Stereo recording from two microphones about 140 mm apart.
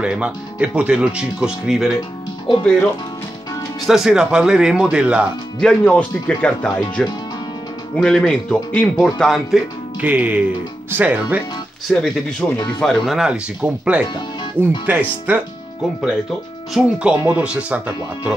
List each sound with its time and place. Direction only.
0.0 s speech: 10° right (ahead or behind)
2.6 s speech: 5° left (ahead or behind)
5.6 s speech: 10° left (ahead or behind)
9.9 s speech: 10° right (ahead or behind)
11.9 s speech: 5° left (ahead or behind)
14.0 s speech: 35° left (ahead or behind)
14.9 s speech: 10° right (ahead or behind)
17.1 s speech: 10° right (ahead or behind)